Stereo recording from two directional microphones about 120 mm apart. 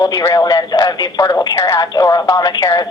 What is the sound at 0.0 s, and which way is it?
Speech, 30° left (ahead or behind).